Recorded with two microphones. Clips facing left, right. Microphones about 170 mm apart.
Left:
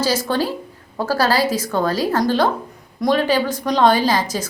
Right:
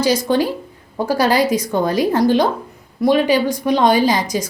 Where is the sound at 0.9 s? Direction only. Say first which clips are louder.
Right 2 dB; 15° right (ahead or behind).